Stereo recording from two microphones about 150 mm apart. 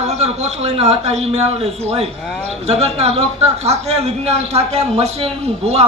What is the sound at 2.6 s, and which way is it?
A man's voice, 45° right (ahead or behind).